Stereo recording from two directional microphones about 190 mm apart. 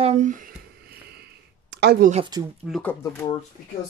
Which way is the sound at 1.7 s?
60° right (ahead or behind).